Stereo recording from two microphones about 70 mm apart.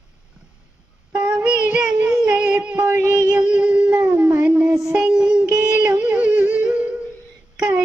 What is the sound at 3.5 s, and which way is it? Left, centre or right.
Howl, centre.